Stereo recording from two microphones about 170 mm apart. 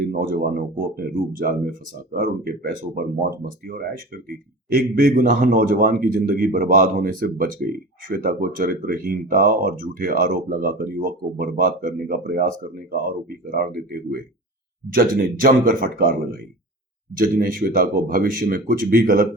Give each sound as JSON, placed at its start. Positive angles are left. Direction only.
{"t": 0.0, "sound": "speech", "side_deg": -55}